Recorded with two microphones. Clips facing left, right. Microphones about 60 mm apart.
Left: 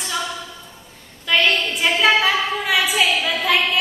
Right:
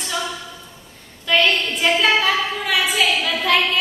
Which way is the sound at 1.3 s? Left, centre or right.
Centre.